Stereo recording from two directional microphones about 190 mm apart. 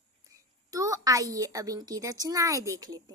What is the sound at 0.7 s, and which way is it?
A woman's voice, 20° right (ahead or behind).